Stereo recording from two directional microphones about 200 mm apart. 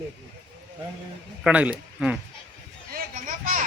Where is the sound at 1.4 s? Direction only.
5° right (ahead or behind).